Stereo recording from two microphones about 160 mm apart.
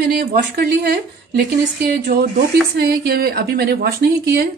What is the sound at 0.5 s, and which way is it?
Speech, 75° right (ahead or behind).